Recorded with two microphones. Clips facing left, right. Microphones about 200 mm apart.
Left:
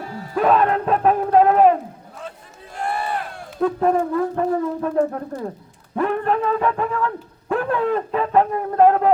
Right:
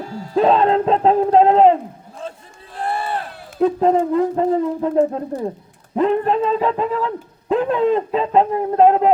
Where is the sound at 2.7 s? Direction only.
30° right (ahead or behind).